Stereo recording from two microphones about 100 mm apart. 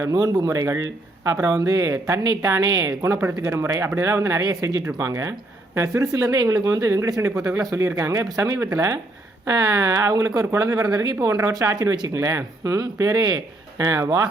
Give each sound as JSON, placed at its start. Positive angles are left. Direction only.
{"t": 0.0, "sound": "speech", "side_deg": -35}